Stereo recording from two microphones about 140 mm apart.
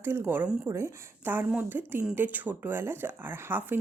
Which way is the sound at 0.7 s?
20° right (ahead or behind).